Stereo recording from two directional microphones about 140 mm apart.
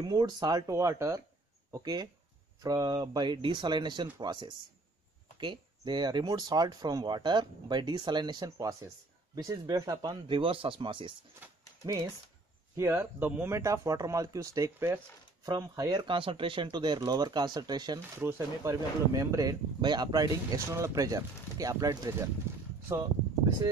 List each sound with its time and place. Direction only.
0.0 s speech: 30° right (ahead or behind)
11.4 s speech: 10° right (ahead or behind)
12.7 s speech: 20° right (ahead or behind)